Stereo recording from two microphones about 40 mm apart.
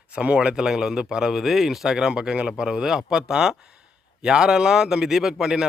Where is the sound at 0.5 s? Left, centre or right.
Centre.